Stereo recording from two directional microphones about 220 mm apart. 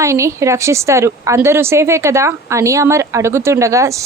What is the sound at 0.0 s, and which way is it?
A woman's voice, 15° right (ahead or behind).